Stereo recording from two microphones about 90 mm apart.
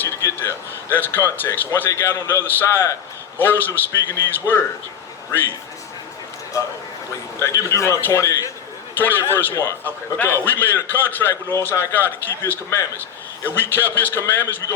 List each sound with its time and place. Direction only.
0.0 s a man's voice: 25° left (ahead or behind)
7.3 s a man's voice: 30° left (ahead or behind)
9.0 s a man's voice: 25° left (ahead or behind)